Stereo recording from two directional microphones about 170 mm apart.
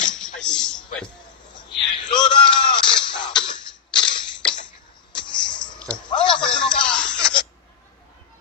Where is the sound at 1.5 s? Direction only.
30° left (ahead or behind).